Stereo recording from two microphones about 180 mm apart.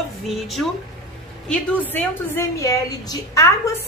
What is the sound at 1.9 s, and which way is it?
A woman's voice, 15° left (ahead or behind).